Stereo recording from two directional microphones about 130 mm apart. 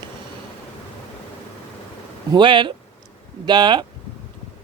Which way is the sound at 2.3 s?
35° right (ahead or behind).